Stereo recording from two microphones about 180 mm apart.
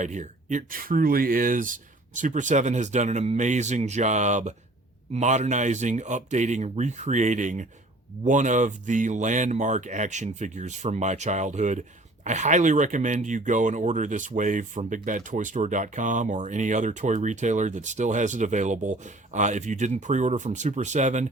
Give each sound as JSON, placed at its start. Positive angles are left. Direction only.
{"t": 0.0, "sound": "speech", "side_deg": -40}